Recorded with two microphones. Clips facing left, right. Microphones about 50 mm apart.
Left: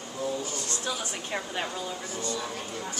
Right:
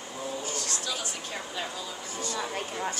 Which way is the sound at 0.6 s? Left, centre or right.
Left.